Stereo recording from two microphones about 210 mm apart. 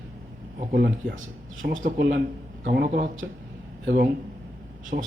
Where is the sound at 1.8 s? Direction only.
40° right (ahead or behind).